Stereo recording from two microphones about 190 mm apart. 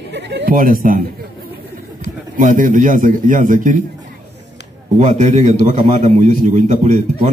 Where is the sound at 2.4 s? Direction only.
45° right (ahead or behind).